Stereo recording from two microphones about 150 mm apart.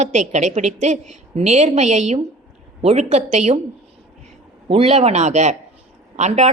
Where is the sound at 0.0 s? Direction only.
50° right (ahead or behind).